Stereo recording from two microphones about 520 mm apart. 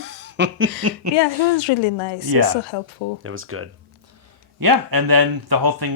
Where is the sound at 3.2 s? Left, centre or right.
Right.